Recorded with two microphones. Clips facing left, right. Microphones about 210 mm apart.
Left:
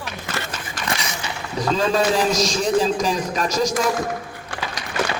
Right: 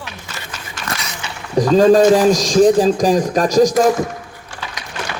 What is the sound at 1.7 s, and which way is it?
Speech, 45° right (ahead or behind).